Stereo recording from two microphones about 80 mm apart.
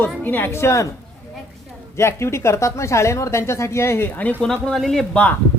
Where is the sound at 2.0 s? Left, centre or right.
Left.